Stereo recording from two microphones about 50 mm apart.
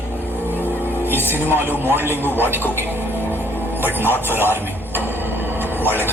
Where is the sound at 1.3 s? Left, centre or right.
Right.